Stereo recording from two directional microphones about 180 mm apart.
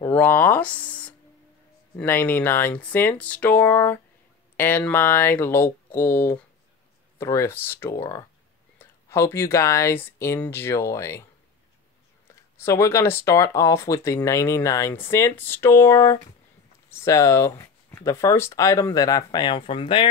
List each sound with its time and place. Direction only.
0.0 s speech: 10° left (ahead or behind)
12.5 s speech: 15° left (ahead or behind)